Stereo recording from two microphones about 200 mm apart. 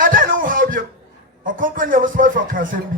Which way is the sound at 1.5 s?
40° right (ahead or behind).